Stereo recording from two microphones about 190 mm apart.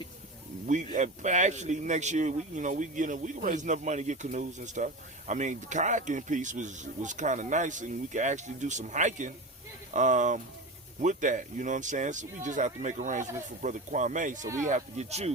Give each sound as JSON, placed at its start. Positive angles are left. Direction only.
{"t": 0.9, "sound": "speech", "side_deg": -40}